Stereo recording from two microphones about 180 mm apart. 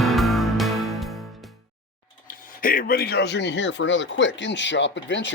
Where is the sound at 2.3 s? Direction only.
50° left (ahead or behind).